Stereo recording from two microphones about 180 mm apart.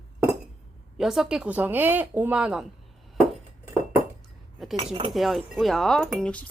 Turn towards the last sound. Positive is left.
turn(degrees=5)  # may be behind; listen again after turning